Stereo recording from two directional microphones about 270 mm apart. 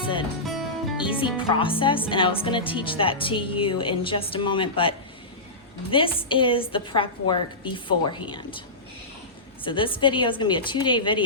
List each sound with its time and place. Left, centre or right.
0.4 s music: centre
1.1 s speech: centre
9.6 s a woman's voice: centre